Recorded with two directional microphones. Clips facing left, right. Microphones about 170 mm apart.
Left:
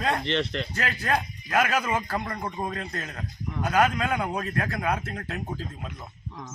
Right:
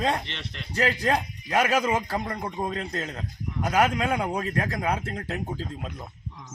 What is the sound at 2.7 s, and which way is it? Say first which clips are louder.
Speech: right 3 dB; 25° right (ahead or behind).